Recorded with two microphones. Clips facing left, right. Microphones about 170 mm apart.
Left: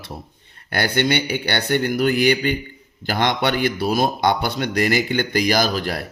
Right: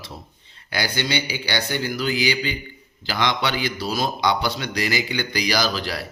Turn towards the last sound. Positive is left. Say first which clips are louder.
# left 3 dB
turn(degrees=50)  # may be behind; listen again after turning